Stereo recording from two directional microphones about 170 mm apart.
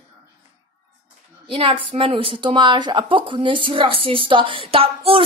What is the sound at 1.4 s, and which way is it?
A woman's voice, 30° right (ahead or behind).